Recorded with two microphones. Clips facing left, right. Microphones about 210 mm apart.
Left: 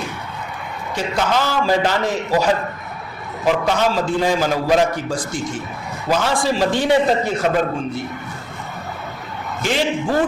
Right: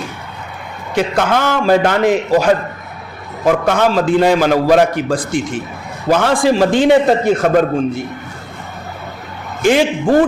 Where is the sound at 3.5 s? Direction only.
55° right (ahead or behind).